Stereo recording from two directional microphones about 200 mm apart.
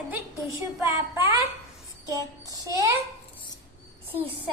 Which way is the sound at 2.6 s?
15° right (ahead or behind).